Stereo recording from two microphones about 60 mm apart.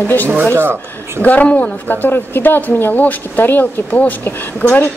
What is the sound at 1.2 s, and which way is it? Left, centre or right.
Speech, left.